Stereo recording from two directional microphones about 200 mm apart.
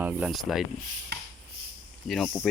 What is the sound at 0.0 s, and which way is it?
Speech, 5° right (ahead or behind).